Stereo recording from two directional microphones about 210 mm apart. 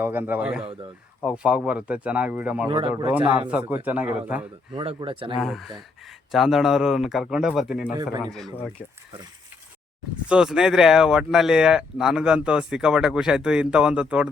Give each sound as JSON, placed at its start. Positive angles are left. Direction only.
{"t": 0.0, "sound": "speech", "side_deg": -10}
{"t": 0.6, "sound": "speech", "side_deg": -25}
{"t": 1.2, "sound": "speech", "side_deg": -5}
{"t": 2.6, "sound": "speech", "side_deg": -25}
{"t": 3.8, "sound": "speech", "side_deg": -5}
{"t": 4.7, "sound": "speech", "side_deg": -25}
{"t": 5.4, "sound": "speech", "side_deg": 0}
{"t": 10.2, "sound": "speech", "side_deg": -5}